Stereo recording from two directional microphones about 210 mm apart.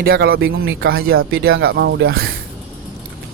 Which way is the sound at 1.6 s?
55° right (ahead or behind).